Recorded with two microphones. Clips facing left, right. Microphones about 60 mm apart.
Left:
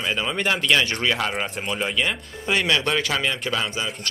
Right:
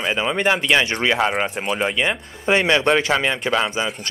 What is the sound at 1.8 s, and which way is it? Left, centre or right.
Speech, centre.